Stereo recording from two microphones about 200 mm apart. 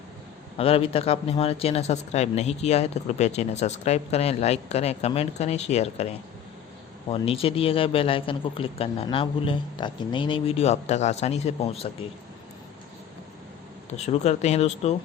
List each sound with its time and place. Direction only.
0.5 s speech: 30° left (ahead or behind)
7.1 s speech: 30° left (ahead or behind)
13.9 s speech: 35° left (ahead or behind)